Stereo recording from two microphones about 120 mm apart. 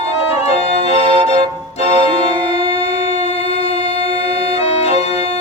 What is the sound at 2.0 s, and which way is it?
Music, 40° right (ahead or behind).